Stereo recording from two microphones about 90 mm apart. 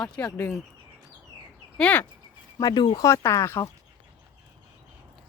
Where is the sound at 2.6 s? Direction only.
55° left (ahead or behind).